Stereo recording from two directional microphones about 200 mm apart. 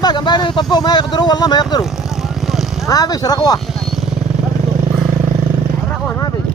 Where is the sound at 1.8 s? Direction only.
Centre (ahead or behind).